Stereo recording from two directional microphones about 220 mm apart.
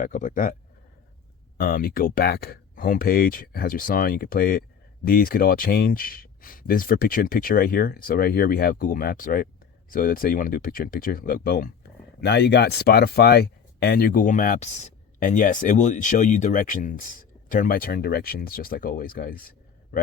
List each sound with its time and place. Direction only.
0.0 s speech: 35° left (ahead or behind)
1.5 s speech: 40° left (ahead or behind)